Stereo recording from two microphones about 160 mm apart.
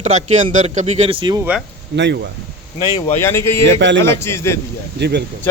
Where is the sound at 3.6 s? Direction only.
90° right.